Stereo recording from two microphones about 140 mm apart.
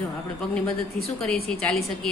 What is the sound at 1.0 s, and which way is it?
A woman's voice, 10° left (ahead or behind).